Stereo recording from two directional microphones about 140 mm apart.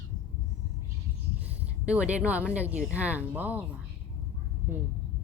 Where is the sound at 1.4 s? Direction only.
10° right (ahead or behind).